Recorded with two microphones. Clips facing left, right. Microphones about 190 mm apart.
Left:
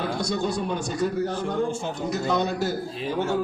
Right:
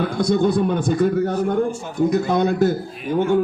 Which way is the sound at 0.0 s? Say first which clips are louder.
Right 8 dB; 55° right (ahead or behind).